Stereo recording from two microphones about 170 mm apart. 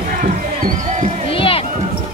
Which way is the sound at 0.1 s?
55° right (ahead or behind).